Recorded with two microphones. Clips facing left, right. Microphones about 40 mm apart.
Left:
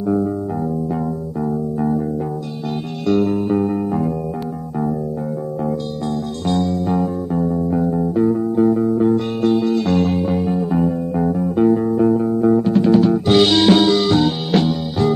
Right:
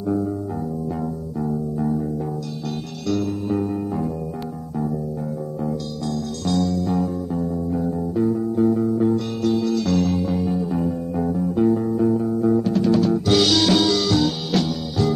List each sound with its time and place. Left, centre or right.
3.1 s music: left
6.4 s music: left